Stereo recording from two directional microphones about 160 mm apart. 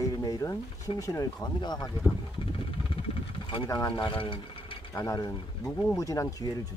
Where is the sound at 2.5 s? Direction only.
35° left (ahead or behind).